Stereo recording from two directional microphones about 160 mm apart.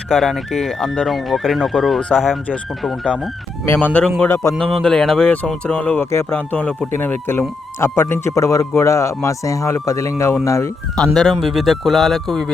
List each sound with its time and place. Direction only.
0.1 s speech: centre (ahead or behind)
4.5 s speech: centre (ahead or behind); by 10.7 s 20° left (ahead or behind)
10.9 s speech: 5° left (ahead or behind)